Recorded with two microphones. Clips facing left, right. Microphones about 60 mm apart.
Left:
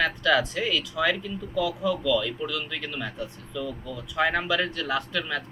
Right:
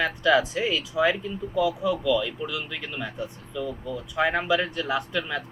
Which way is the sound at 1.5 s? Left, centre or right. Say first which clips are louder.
Right 2 dB; centre.